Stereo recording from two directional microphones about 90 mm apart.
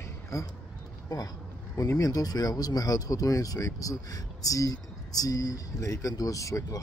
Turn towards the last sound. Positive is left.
turn(degrees=40)  # may be behind; listen again after turning